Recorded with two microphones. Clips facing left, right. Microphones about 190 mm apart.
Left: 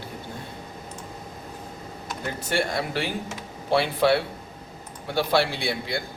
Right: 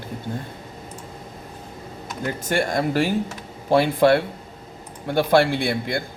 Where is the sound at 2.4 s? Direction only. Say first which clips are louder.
Right 4 dB; 45° right (ahead or behind).